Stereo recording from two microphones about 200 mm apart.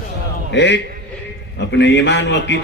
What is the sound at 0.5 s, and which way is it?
Speech, 60° left (ahead or behind).